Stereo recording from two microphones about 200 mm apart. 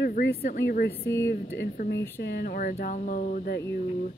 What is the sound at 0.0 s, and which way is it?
Speech, 50° left (ahead or behind).